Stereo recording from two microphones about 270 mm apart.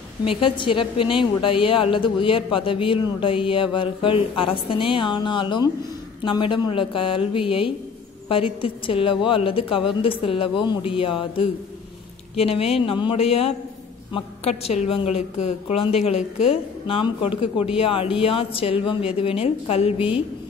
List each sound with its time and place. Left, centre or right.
0.4 s speech: centre